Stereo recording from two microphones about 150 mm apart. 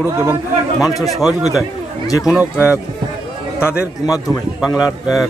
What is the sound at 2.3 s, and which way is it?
Speech, 10° right (ahead or behind).